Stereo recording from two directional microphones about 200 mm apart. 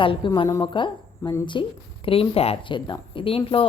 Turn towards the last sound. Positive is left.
turn(degrees=25)  # may be behind; listen again after turning